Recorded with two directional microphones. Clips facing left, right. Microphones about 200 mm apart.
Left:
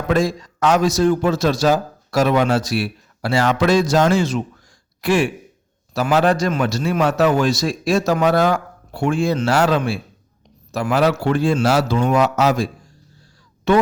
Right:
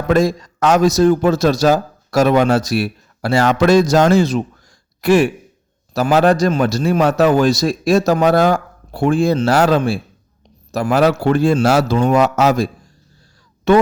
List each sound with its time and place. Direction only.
0.1 s a man's voice: 40° right (ahead or behind)